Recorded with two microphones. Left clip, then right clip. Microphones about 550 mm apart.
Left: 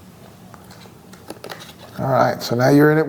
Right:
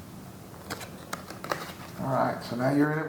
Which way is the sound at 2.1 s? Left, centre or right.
Left.